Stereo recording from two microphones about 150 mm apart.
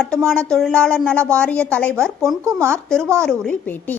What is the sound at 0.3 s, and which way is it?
A woman's voice, 5° left (ahead or behind).